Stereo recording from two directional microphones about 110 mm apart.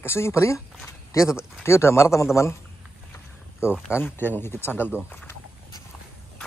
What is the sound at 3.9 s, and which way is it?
Speech, 20° left (ahead or behind).